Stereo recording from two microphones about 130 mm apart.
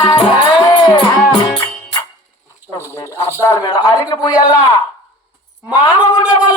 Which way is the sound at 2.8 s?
25° left (ahead or behind).